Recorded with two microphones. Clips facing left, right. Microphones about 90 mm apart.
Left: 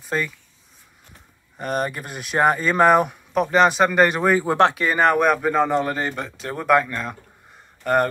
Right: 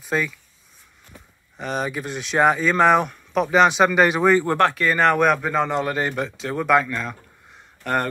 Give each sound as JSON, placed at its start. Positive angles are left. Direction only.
{"t": 0.0, "sound": "speech", "side_deg": 0}
{"t": 1.6, "sound": "speech", "side_deg": 0}
{"t": 4.6, "sound": "speech", "side_deg": 15}